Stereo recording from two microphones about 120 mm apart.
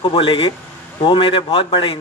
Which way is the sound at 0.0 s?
45° left (ahead or behind).